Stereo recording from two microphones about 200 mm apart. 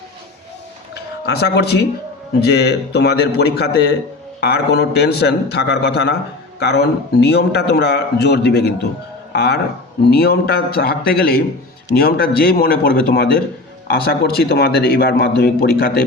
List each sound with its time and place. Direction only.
1.2 s a man's voice: 55° left (ahead or behind)